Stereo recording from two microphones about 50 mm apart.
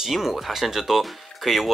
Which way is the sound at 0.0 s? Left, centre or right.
Centre.